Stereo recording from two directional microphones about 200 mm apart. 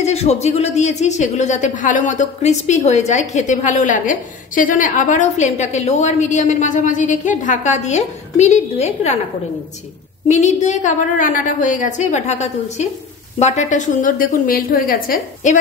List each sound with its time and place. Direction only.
0.0 s a woman's voice: 35° left (ahead or behind)
10.2 s a woman's voice: 35° left (ahead or behind)